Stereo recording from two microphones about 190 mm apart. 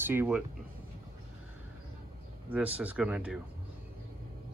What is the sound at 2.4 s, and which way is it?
Speech, 10° right (ahead or behind).